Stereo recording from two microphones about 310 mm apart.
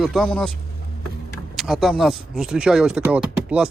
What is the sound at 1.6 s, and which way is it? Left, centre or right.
Speech, centre.